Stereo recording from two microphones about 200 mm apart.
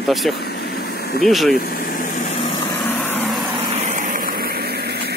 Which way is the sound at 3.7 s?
35° right (ahead or behind).